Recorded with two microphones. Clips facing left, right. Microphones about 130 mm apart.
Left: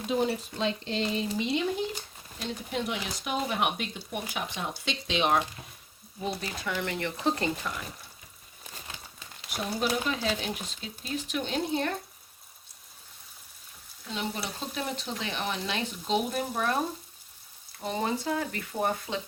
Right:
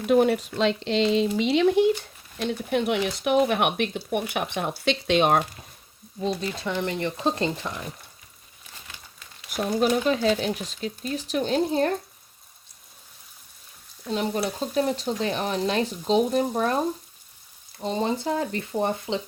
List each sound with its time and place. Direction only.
0.1 s speech: 70° right (ahead or behind)
2.4 s speech: 65° right (ahead or behind)
6.2 s speech: 25° right (ahead or behind)
10.1 s speech: 35° right (ahead or behind)
14.1 s speech: 45° right (ahead or behind)
17.8 s speech: 25° right (ahead or behind)